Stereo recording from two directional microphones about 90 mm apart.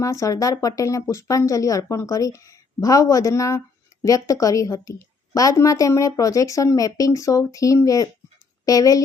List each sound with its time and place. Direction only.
0.0 s a woman's voice: 35° left (ahead or behind)